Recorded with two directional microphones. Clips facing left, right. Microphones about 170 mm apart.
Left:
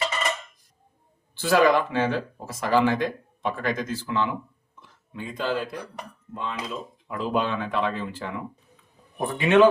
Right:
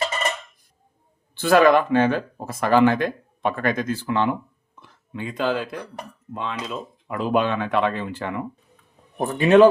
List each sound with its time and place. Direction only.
1.4 s speech: 60° right (ahead or behind)
5.1 s speech: 75° right (ahead or behind)
6.3 s speech: 90° right
7.1 s speech: 65° right (ahead or behind)
9.1 s a man's voice: 40° right (ahead or behind)